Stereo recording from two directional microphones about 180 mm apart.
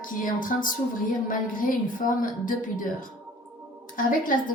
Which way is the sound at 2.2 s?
50° left (ahead or behind).